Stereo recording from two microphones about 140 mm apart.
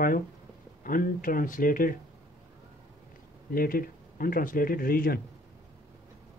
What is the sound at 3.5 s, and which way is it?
Speech, 90° left.